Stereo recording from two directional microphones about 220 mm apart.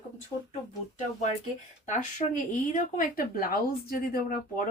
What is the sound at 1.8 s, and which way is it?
Speech, 35° left (ahead or behind).